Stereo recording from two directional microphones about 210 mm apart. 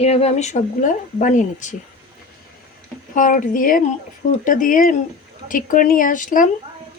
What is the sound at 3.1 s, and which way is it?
Speech, 40° left (ahead or behind).